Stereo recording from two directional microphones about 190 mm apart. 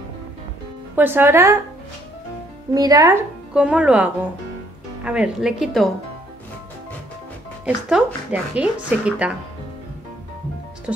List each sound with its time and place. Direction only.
0.9 s a woman's voice: 10° right (ahead or behind)
2.7 s speech: 20° right (ahead or behind)
3.5 s a woman's voice: 5° right (ahead or behind)
7.6 s a woman's voice: 5° right (ahead or behind)